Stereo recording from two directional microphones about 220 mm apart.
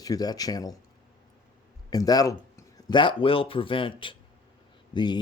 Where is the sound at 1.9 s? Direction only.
15° left (ahead or behind).